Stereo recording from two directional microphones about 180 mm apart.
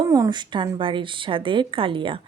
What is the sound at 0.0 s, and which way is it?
A woman's voice, 20° right (ahead or behind).